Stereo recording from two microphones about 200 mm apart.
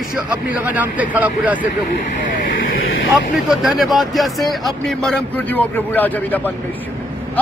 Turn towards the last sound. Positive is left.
turn(degrees=10)  # may be behind; listen again after turning